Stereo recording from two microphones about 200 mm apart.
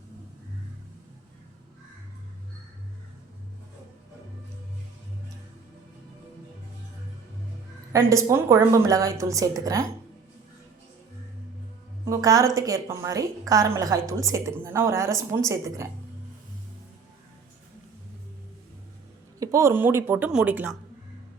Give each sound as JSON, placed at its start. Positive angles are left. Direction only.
{"t": 7.9, "sound": "a woman's voice", "side_deg": -15}
{"t": 12.0, "sound": "a woman's voice", "side_deg": -20}
{"t": 19.4, "sound": "a woman's voice", "side_deg": -15}